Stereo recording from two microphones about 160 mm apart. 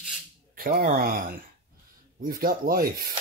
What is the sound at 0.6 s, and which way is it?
Speech, 70° right (ahead or behind).